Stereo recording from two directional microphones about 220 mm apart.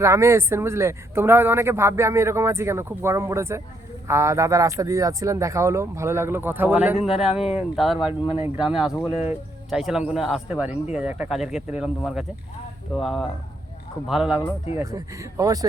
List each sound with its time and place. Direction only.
0.0 s speech: 15° right (ahead or behind)
7.9 s speech: 25° left (ahead or behind)
8.5 s speech: 5° right (ahead or behind)
14.8 s speech: 15° right (ahead or behind)